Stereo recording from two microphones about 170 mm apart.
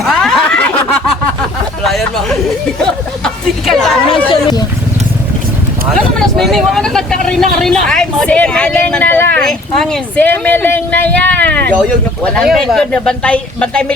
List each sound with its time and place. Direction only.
0.0 s snicker: centre (ahead or behind)
1.8 s chatter: centre (ahead or behind)
2.8 s a sound: 5° left (ahead or behind)
5.9 s speech: 5° left (ahead or behind)